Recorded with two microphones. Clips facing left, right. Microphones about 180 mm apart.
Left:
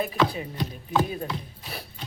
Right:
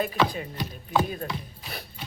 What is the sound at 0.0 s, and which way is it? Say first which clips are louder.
Music: left 1 dB; centre (ahead or behind).